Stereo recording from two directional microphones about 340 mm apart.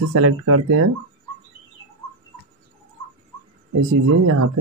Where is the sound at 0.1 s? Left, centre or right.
Right.